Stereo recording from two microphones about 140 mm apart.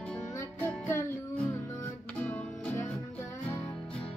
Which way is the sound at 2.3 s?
15° left (ahead or behind).